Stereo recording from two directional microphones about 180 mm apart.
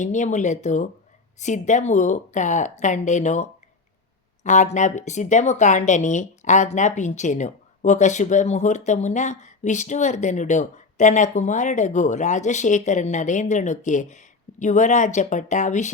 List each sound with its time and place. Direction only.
0.0 s speech: 40° left (ahead or behind)